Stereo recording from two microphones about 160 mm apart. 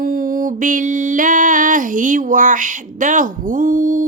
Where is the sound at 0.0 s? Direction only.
60° right (ahead or behind).